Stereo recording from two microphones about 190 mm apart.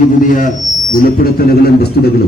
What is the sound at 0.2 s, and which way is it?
A man's voice, 45° left (ahead or behind).